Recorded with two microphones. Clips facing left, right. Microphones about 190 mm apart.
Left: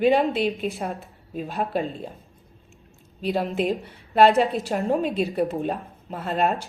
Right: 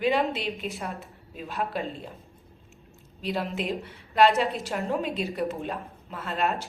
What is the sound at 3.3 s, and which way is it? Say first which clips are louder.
Speech: left 5 dB; 45° left (ahead or behind).